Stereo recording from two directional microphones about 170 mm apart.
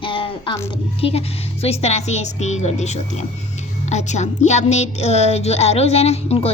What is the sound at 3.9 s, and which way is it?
Speech, 45° left (ahead or behind).